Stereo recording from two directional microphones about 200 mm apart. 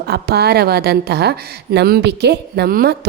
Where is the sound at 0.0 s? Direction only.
55° right (ahead or behind).